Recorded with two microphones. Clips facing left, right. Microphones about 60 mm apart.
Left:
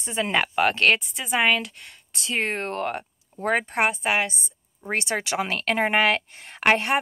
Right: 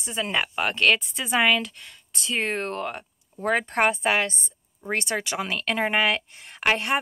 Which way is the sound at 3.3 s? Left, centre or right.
Left.